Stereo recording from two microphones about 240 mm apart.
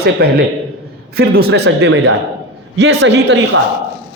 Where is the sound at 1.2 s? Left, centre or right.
Right.